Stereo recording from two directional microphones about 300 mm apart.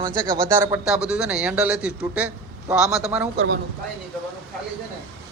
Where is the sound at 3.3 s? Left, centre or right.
Right.